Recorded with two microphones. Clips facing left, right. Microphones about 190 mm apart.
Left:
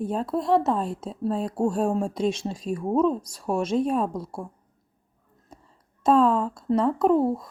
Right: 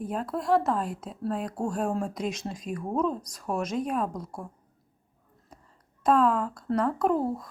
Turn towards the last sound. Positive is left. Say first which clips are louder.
# left 5 dB
turn(degrees=25)  # may be behind; listen again after turning